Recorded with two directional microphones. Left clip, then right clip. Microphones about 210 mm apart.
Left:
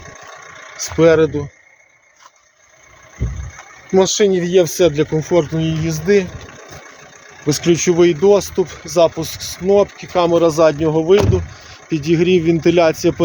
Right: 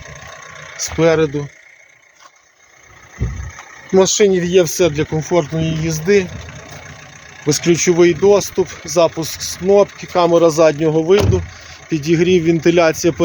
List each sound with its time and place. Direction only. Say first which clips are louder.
0.0 s vehicle: right 1 dB; 35° left (ahead or behind)
0.8 s speech: left 2 dB; centre (ahead or behind)
3.9 s speech: right 1 dB; centre (ahead or behind)
6.3 s vehicle: right 1 dB; 40° left (ahead or behind)
7.4 s speech: right 1 dB; centre (ahead or behind)